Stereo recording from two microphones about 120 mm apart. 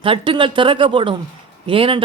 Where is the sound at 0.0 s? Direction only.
45° right (ahead or behind).